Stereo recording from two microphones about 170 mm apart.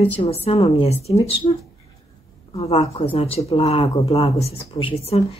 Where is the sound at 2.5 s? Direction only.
35° left (ahead or behind).